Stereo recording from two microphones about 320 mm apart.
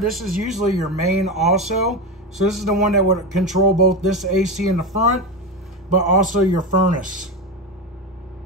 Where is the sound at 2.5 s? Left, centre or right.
Centre.